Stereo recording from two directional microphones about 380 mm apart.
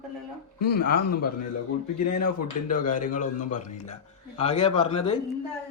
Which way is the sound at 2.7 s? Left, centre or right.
Left.